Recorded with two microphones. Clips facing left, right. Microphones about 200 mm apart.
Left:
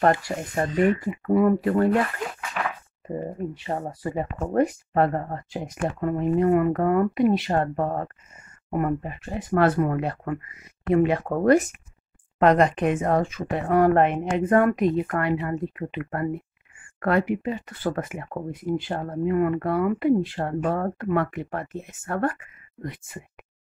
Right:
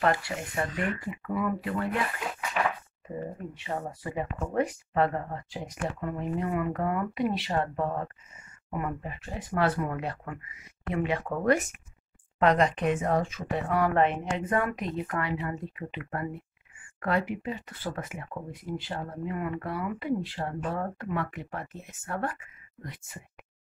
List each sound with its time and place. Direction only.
0.3 s speech: 45° left (ahead or behind)
0.7 s speech: 20° left (ahead or behind)
1.0 s speech: 45° left (ahead or behind)
2.6 s speech: 5° right (ahead or behind)
3.5 s speech: 35° left (ahead or behind)
12.4 s speech: 50° left (ahead or behind)